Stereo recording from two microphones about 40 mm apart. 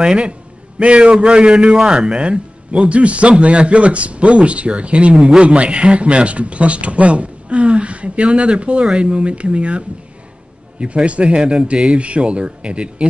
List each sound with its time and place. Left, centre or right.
0.0 s a man's voice: right